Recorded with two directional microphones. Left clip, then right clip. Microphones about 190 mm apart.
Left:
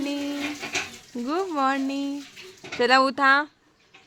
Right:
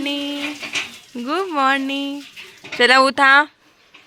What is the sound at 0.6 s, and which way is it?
Dishes, 60° left (ahead or behind).